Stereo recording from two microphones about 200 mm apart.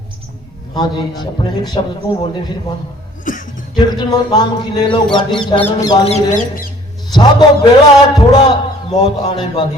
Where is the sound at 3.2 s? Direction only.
40° left (ahead or behind).